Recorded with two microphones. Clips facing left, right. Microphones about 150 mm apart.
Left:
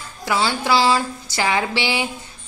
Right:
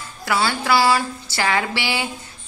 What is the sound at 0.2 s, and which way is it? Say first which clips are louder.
A woman's voice: left 1 dB; 15° left (ahead or behind).